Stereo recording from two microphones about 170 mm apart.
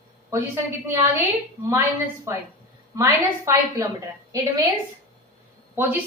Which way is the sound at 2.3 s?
20° right (ahead or behind).